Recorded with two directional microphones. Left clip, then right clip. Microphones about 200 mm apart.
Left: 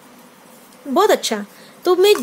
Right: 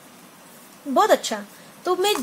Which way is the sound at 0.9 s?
50° left (ahead or behind).